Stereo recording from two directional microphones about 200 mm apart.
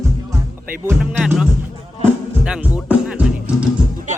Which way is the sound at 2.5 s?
5° right (ahead or behind).